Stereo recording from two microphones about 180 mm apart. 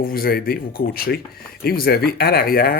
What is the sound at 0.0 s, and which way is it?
Speech, 55° left (ahead or behind).